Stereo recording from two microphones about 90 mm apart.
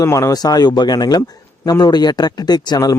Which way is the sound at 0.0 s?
35° left (ahead or behind).